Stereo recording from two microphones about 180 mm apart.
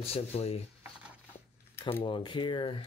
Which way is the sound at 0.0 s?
35° left (ahead or behind).